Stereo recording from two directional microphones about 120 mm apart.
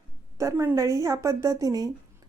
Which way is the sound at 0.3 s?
25° right (ahead or behind).